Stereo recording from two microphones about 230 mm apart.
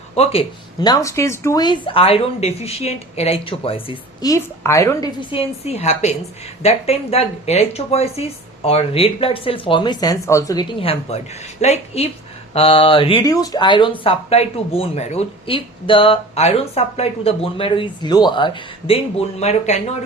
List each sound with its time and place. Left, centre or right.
0.2 s speech: left